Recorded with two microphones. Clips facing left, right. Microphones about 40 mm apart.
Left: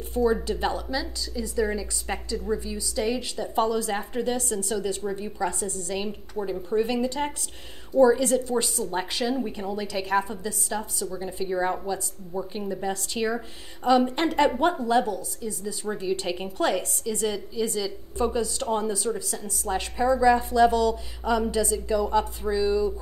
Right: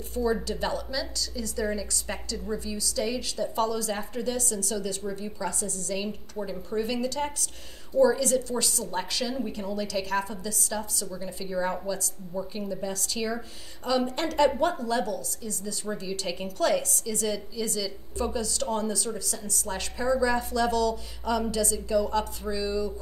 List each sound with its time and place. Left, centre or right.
0.1 s a woman's voice: left
6.5 s speech: centre
6.9 s a woman's voice: left